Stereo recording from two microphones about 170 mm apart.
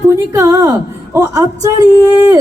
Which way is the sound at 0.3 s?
20° right (ahead or behind).